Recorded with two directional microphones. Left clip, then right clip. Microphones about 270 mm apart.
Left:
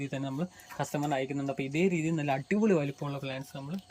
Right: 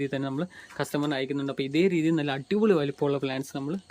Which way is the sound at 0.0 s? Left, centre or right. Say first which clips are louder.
Right 6 dB; centre.